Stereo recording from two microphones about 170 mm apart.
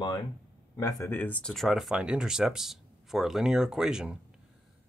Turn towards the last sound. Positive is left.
turn(degrees=-5)  # may be behind; listen again after turning